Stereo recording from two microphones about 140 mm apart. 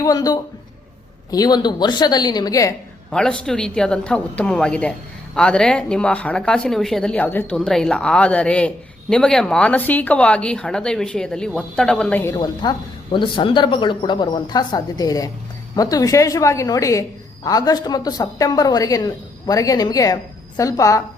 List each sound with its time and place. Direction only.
0.0 s a woman's voice: 25° left (ahead or behind)
3.1 s speech: 5° left (ahead or behind)
12.2 s a woman's voice: 25° left (ahead or behind)
13.1 s a woman's voice: 35° left (ahead or behind)